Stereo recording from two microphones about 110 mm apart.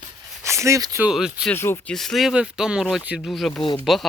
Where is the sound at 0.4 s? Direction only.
25° right (ahead or behind).